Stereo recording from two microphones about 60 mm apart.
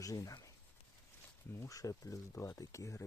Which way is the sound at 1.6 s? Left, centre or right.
Left.